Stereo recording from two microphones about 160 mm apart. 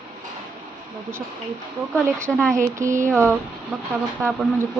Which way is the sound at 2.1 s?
15° right (ahead or behind).